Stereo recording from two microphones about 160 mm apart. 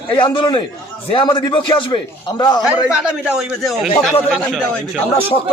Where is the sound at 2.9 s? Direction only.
5° right (ahead or behind).